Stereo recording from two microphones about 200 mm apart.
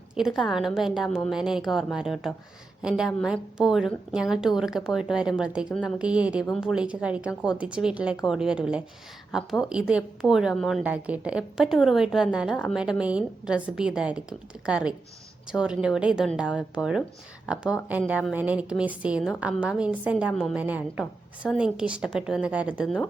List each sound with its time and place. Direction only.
0.2 s a woman's voice: centre (ahead or behind)